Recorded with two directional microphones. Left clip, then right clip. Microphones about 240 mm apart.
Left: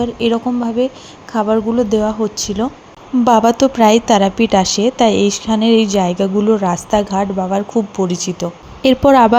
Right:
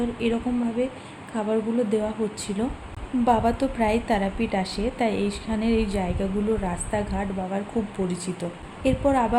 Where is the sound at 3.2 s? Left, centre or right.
Left.